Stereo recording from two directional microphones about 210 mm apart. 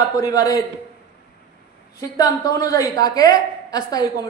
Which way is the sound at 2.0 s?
15° left (ahead or behind).